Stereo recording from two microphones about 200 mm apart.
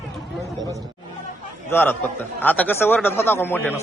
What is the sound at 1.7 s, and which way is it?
A man's voice, 10° left (ahead or behind).